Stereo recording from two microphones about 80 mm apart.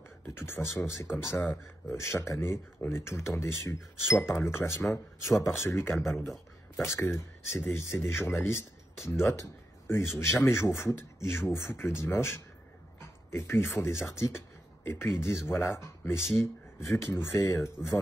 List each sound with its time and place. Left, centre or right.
0.3 s speech: left